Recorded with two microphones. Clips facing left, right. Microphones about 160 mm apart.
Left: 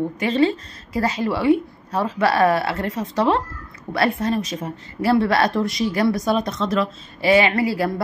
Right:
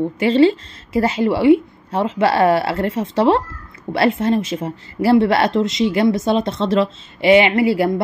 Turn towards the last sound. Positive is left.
turn(degrees=-25)  # may be behind; listen again after turning